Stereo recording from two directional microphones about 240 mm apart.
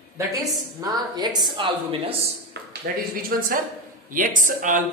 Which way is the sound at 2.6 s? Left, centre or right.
Right.